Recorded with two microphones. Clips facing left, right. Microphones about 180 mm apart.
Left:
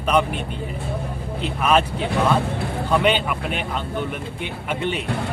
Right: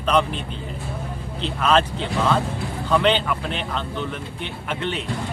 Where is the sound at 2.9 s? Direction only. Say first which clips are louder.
Right 1 dB; 10° left (ahead or behind).